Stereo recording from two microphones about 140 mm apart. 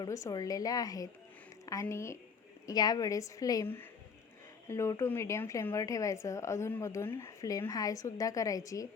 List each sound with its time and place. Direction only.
0.0 s speech: 25° left (ahead or behind)
4.7 s speech: 20° left (ahead or behind)